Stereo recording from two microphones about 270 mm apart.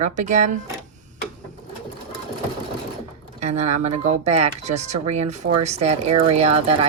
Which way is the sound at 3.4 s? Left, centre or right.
Right.